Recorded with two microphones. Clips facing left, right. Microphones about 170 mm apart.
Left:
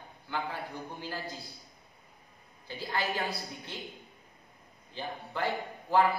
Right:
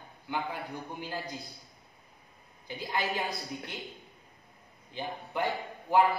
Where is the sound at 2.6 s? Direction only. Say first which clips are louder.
Right 1 dB; 20° right (ahead or behind).